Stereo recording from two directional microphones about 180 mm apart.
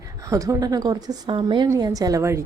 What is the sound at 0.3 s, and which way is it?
A woman's voice, 20° right (ahead or behind).